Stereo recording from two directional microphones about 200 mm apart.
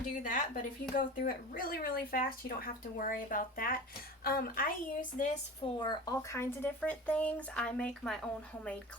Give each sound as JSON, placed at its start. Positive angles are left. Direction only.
{"t": 0.2, "sound": "speech", "side_deg": 40}
{"t": 5.8, "sound": "speech", "side_deg": 20}